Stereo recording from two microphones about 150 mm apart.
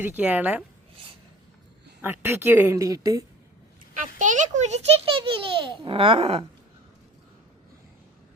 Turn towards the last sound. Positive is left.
turn(degrees=-40)  # may be behind; listen again after turning